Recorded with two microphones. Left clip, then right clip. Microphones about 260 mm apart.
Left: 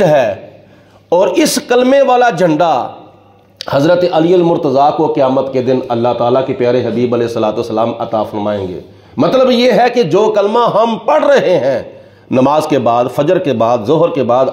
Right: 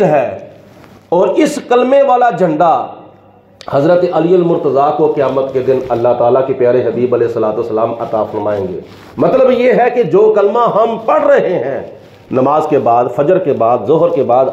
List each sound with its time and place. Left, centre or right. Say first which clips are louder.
0.0 s a man's voice: left 1 dB; left
1.1 s a man's voice: left 1 dB; left
10.8 s a man's voice: even; left